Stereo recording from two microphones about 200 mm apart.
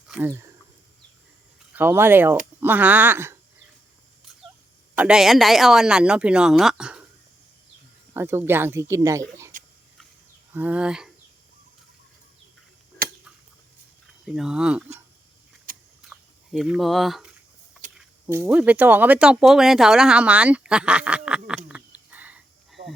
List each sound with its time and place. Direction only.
0.1 s speech: 10° right (ahead or behind)
1.7 s speech: 10° right (ahead or behind)
4.9 s speech: 5° right (ahead or behind)
8.1 s speech: 10° right (ahead or behind)
9.5 s a sound: 40° right (ahead or behind)
10.5 s speech: 10° right (ahead or behind)
13.0 s a sound: 50° right (ahead or behind)
14.3 s speech: 5° right (ahead or behind)
16.0 s a sound: centre (ahead or behind)
18.3 s speech: 10° right (ahead or behind)